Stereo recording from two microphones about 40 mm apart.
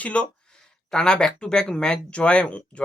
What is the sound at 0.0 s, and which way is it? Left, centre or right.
Speech, left.